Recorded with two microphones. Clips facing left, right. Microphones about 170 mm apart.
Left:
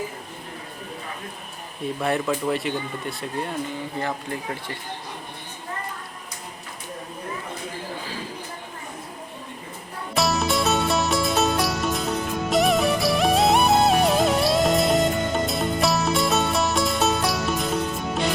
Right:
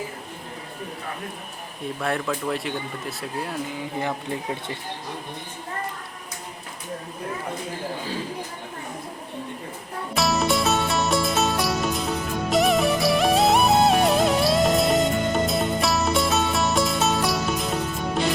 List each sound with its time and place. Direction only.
2.0 s speech: 5° left (ahead or behind)
4.0 s speech: 15° right (ahead or behind)
10.2 s music: centre (ahead or behind)